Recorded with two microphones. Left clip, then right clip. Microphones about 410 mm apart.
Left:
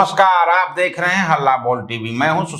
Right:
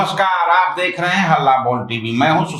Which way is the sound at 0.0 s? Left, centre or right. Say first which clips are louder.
Left 3 dB; left.